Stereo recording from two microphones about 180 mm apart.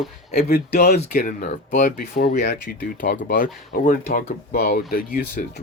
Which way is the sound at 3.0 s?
50° left (ahead or behind).